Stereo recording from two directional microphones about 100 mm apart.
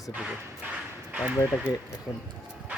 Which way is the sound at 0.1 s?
10° right (ahead or behind).